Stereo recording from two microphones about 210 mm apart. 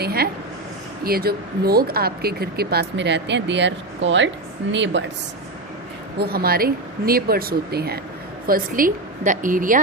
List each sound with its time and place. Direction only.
0.0 s a woman's voice: 50° right (ahead or behind)
6.1 s a woman's voice: 45° right (ahead or behind)